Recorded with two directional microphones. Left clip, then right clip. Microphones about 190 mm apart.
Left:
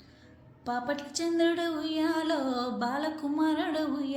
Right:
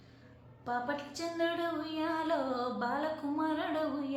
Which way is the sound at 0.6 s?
45° left (ahead or behind).